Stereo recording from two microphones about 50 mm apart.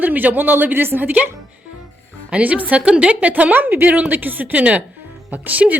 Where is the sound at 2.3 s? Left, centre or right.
Right.